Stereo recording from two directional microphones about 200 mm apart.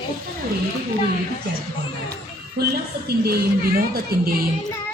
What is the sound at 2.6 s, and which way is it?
A woman's voice, 50° right (ahead or behind).